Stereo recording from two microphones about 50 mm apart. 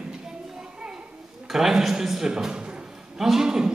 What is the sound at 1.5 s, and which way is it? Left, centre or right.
A man's voice, centre.